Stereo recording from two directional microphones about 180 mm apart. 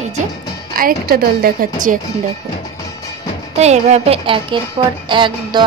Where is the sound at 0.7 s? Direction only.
55° right (ahead or behind).